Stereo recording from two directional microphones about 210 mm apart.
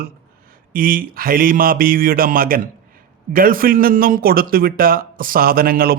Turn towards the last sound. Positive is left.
turn(degrees=-45)  # may be behind; listen again after turning